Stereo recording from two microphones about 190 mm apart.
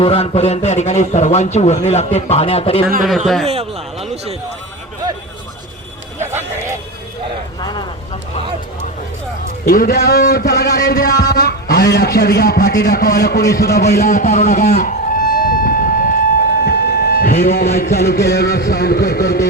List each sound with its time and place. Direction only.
0.0 s a man's voice: 30° left (ahead or behind)
3.4 s a man's voice: 30° right (ahead or behind)
6.1 s a sound: 15° right (ahead or behind)
7.6 s vehicle: 20° left (ahead or behind)
9.6 s a man's voice: 55° left (ahead or behind)
14.7 s music: 45° left (ahead or behind)
16.6 s speech: 55° left (ahead or behind)